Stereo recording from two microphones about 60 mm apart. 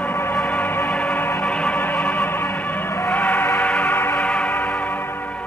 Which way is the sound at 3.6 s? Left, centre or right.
Left.